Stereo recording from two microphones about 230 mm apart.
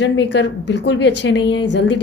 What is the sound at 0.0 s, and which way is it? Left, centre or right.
A woman's voice, left.